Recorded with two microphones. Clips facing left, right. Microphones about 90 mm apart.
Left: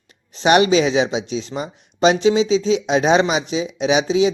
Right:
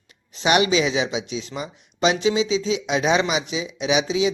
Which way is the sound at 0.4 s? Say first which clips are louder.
Left 5 dB; 40° left (ahead or behind).